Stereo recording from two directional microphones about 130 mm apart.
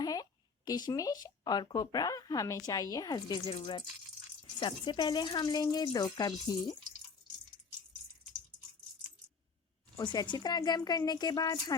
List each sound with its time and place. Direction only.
0.0 s speech: 30° left (ahead or behind)
10.0 s speech: 35° left (ahead or behind)